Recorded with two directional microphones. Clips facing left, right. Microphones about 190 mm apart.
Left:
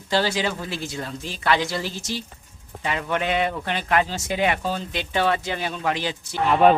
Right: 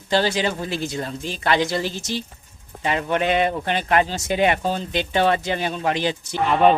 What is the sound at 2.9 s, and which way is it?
Speech, 40° right (ahead or behind).